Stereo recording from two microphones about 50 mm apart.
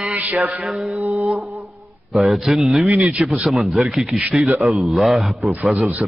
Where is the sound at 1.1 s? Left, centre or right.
Centre.